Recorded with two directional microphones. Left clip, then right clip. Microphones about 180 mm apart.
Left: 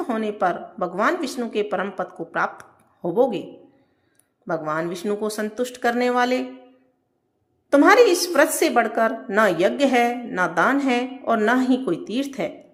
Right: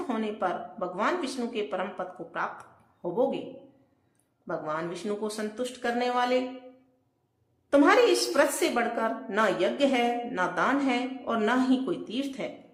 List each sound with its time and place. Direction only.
0.1 s a woman's voice: 35° left (ahead or behind)
4.4 s a woman's voice: 35° left (ahead or behind)
7.7 s a woman's voice: 35° left (ahead or behind)